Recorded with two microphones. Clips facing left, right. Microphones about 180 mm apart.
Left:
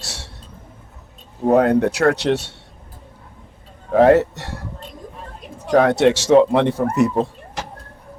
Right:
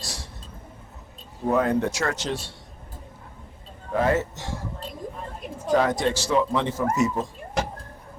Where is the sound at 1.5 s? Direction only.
65° left (ahead or behind).